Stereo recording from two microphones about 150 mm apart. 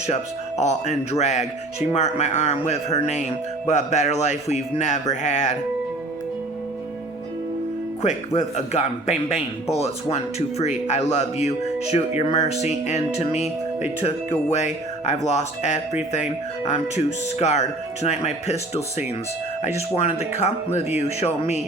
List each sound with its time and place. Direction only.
0.1 s speech: 50° left (ahead or behind)
8.0 s speech: 50° left (ahead or behind)
14.5 s speech: 50° left (ahead or behind)